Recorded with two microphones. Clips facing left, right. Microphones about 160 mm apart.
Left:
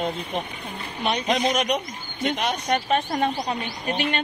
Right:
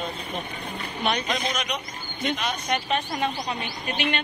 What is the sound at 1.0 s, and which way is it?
Speech, 25° left (ahead or behind).